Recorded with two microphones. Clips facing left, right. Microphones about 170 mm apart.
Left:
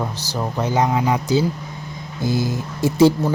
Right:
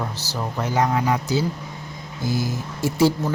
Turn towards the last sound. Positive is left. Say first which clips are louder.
# left 5 dB
turn(degrees=20)  # may be behind; listen again after turning